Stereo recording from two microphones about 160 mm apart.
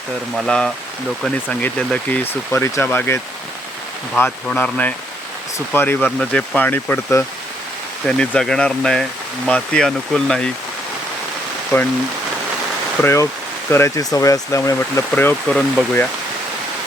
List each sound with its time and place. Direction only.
0.3 s speech: 5° left (ahead or behind)
13.0 s speech: 15° left (ahead or behind)